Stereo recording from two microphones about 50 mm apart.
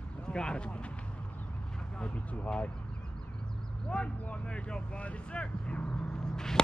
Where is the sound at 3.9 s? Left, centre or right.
Centre.